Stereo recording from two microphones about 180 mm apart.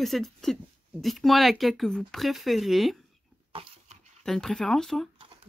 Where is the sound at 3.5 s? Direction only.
30° right (ahead or behind).